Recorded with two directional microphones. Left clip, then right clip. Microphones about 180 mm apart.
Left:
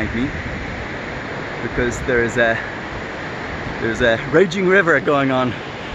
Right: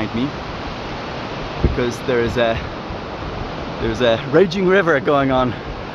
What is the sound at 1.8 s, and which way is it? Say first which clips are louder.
Speech: left 2 dB; 5° left (ahead or behind).